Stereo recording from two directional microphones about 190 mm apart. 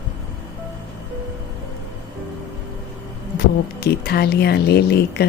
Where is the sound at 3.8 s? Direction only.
55° left (ahead or behind).